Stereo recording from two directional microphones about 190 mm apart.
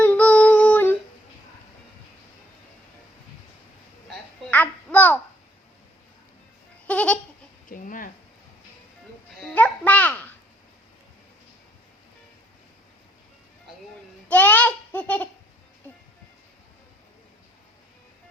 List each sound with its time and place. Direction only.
0.0 s humming: 5° left (ahead or behind)
4.5 s babbling: 10° left (ahead or behind)
6.8 s goat: 5° left (ahead or behind)
7.7 s speech: 45° left (ahead or behind)
9.4 s babbling: 5° left (ahead or behind)
14.3 s babbling: 10° left (ahead or behind)